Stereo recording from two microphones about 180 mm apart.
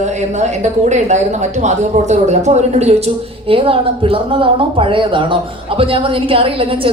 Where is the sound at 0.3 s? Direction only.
40° right (ahead or behind).